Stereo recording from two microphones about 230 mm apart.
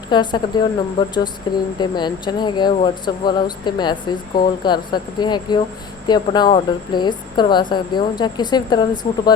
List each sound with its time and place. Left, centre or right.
0.1 s speech: centre